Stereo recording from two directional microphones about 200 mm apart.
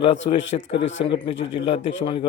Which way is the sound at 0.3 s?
35° left (ahead or behind).